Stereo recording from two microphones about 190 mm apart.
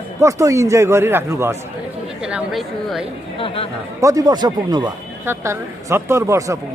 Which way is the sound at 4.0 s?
20° right (ahead or behind).